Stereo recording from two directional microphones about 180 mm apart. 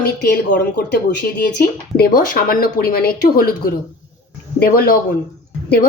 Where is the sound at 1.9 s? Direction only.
60° left (ahead or behind).